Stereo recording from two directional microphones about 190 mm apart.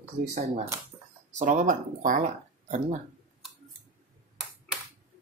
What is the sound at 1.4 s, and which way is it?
Speech, 40° right (ahead or behind).